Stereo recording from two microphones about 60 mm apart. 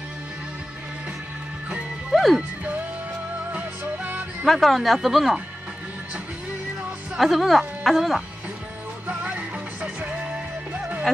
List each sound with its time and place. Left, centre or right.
2.1 s music: centre
3.5 s music: right
4.5 s speech: centre
7.2 s speech: centre
9.0 s music: right